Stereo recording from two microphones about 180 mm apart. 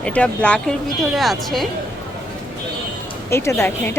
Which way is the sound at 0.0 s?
5° left (ahead or behind).